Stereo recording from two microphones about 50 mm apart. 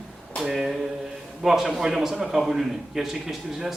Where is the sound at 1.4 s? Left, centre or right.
Centre.